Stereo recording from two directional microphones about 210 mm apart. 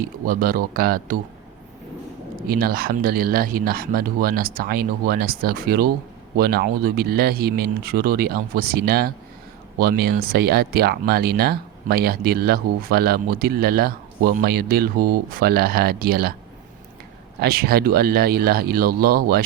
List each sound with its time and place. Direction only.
0.0 s speech: 45° right (ahead or behind)
2.5 s speech: 45° right (ahead or behind)
17.4 s speech: 45° right (ahead or behind)